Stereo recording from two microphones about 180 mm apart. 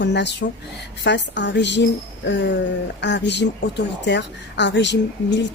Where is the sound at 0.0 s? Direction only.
75° left (ahead or behind).